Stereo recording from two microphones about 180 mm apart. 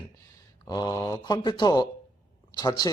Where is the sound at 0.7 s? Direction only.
20° left (ahead or behind).